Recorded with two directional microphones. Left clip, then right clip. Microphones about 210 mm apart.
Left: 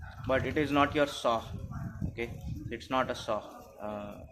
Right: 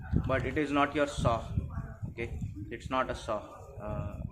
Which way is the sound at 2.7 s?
25° left (ahead or behind).